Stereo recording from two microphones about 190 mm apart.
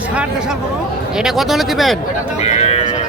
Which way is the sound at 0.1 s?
5° right (ahead or behind).